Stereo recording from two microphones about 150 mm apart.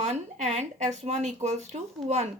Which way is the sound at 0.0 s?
45° right (ahead or behind).